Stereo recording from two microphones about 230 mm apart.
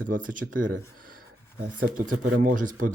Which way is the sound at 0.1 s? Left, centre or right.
Right.